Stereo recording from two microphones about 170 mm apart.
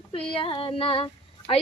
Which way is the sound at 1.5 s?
35° left (ahead or behind).